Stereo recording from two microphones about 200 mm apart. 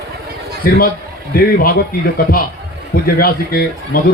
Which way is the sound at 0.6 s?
45° left (ahead or behind).